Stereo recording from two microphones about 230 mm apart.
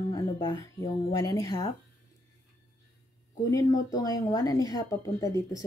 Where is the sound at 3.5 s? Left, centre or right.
Centre.